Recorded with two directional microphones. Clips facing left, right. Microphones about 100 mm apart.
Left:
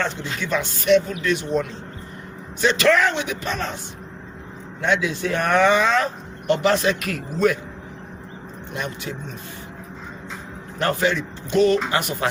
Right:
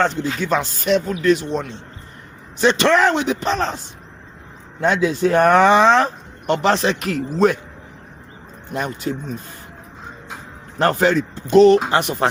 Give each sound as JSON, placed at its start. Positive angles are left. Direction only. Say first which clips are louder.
{"t": 0.0, "sound": "speech", "louder": "right 6 dB", "side_deg": -40}
{"t": 2.7, "sound": "speech", "louder": "right 1 dB", "side_deg": -30}
{"t": 4.8, "sound": "speech", "louder": "right 5 dB", "side_deg": -40}
{"t": 8.7, "sound": "speech", "louder": "right 6 dB", "side_deg": -40}
{"t": 10.8, "sound": "speech", "louder": "right 5 dB", "side_deg": -40}